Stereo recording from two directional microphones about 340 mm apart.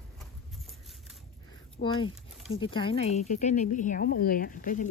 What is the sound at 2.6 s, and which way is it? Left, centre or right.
Speech, centre.